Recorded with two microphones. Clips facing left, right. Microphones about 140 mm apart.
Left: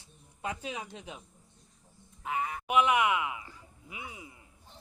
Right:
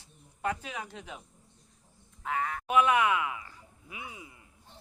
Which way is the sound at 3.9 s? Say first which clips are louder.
Even; 25° left (ahead or behind).